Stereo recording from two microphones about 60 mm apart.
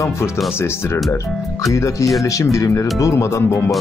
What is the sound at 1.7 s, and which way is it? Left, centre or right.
Speech, left.